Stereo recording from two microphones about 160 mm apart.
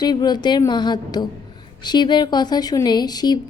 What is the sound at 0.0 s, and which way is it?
Speech, 25° left (ahead or behind).